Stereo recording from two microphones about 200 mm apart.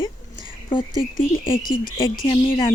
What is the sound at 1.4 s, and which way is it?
Speech, 25° left (ahead or behind).